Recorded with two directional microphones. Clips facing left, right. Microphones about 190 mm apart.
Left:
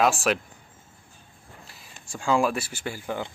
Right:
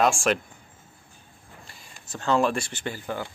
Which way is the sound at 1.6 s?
Centre (ahead or behind).